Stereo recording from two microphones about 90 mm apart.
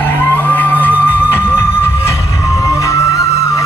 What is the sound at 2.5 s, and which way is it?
Music, 35° left (ahead or behind).